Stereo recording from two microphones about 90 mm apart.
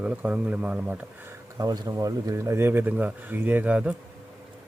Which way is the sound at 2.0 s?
35° right (ahead or behind).